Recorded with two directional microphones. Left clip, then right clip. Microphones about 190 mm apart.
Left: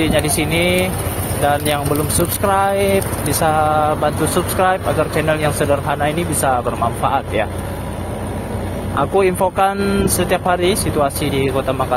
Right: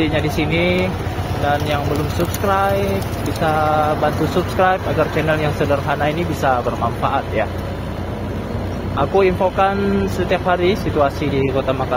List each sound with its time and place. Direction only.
0.0 s speech: 25° left (ahead or behind)
8.9 s speech: 20° left (ahead or behind)